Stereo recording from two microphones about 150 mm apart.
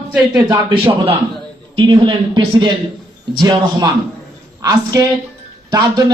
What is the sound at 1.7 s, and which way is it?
A man's voice, 35° right (ahead or behind).